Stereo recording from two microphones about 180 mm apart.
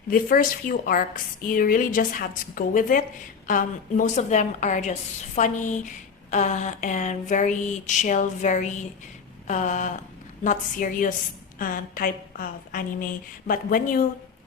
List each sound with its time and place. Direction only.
0.1 s a woman's voice: 50° left (ahead or behind)